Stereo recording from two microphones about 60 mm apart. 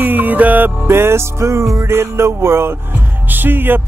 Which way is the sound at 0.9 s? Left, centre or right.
Right.